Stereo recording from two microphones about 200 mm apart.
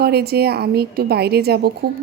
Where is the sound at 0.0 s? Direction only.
50° right (ahead or behind).